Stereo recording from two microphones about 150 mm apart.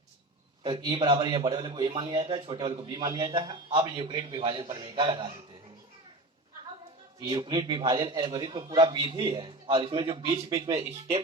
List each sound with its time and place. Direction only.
0.6 s a man's voice: 30° right (ahead or behind)
7.2 s a man's voice: 25° right (ahead or behind)